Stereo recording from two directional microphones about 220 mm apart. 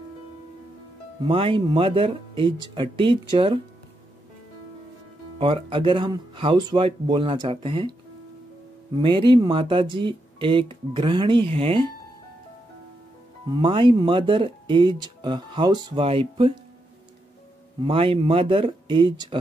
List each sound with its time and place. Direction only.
1.2 s speech: 25° right (ahead or behind)
5.4 s speech: 25° right (ahead or behind)
9.0 s speech: 20° right (ahead or behind)
13.6 s speech: 20° right (ahead or behind)
17.8 s speech: 25° right (ahead or behind)